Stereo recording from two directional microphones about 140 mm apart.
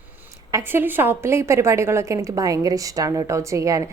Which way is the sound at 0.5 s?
15° right (ahead or behind).